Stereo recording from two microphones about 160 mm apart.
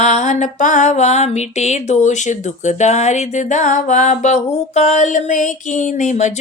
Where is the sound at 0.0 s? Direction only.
50° left (ahead or behind).